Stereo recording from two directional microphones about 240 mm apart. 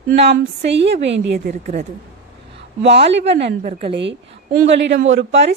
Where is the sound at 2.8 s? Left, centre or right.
Right.